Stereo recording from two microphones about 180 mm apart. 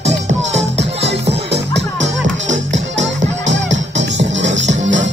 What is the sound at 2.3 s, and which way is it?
Music, 90° right.